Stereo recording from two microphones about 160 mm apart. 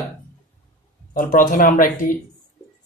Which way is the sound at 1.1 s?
55° left (ahead or behind).